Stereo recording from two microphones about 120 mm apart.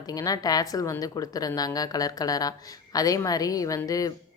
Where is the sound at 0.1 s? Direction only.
30° left (ahead or behind).